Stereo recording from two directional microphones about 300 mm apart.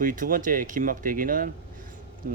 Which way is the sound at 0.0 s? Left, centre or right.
Right.